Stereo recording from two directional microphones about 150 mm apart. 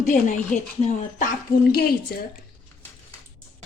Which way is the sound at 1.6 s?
90° left.